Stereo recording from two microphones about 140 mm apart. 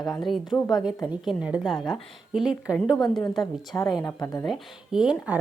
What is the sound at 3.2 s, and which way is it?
Speech, centre (ahead or behind).